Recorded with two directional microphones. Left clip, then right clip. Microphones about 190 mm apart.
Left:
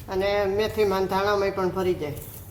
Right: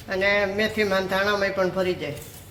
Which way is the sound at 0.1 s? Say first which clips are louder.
Right 2 dB; centre (ahead or behind).